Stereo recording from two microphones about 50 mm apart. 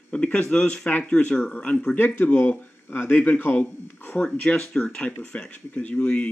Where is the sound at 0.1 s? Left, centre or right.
Left.